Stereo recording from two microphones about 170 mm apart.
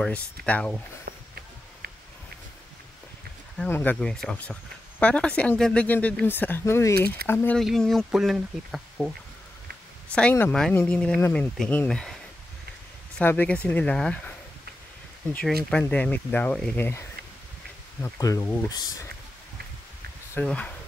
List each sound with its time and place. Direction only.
0.0 s speech: 5° left (ahead or behind)
1.0 s walk: 65° right (ahead or behind)
3.5 s speech: 10° left (ahead or behind)
7.6 s speech: centre (ahead or behind)
10.1 s speech: 10° left (ahead or behind)
13.2 s speech: 10° left (ahead or behind)
15.7 s speech: 10° left (ahead or behind)
18.0 s speech: 15° left (ahead or behind)
20.3 s speech: 10° left (ahead or behind)